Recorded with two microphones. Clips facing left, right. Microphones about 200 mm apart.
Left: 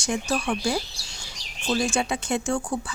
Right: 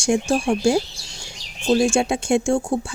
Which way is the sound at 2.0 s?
50° right (ahead or behind).